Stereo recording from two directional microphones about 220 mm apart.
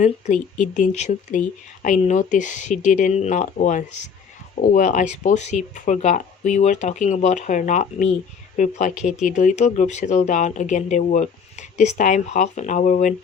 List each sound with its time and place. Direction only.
0.0 s speech: 35° left (ahead or behind)